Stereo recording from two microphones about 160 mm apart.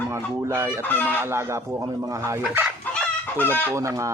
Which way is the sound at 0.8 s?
10° left (ahead or behind).